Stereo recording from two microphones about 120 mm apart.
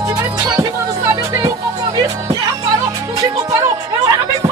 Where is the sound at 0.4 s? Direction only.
30° right (ahead or behind).